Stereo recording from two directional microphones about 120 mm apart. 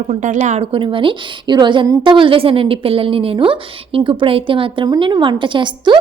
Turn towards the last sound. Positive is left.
turn(degrees=-40)  # may be behind; listen again after turning